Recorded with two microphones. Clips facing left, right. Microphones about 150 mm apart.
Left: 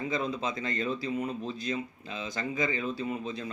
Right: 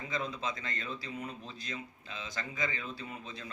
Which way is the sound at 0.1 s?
15° left (ahead or behind).